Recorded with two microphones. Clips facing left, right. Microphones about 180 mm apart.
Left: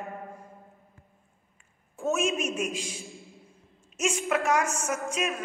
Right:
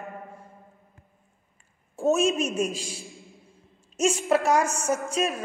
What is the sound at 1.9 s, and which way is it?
A woman's voice, 30° right (ahead or behind).